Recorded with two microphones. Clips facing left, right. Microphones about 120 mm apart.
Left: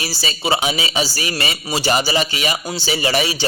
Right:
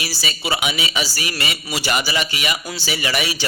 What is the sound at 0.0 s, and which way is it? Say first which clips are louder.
A man's voice: left 3 dB; 30° left (ahead or behind).